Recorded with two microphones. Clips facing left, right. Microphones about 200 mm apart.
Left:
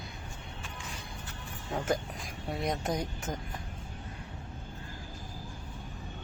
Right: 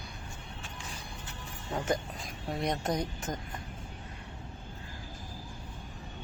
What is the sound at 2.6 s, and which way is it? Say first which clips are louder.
Speech: right 1 dB; 5° left (ahead or behind).